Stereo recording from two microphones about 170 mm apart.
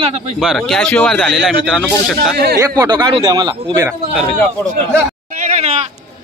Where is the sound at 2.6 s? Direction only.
20° right (ahead or behind).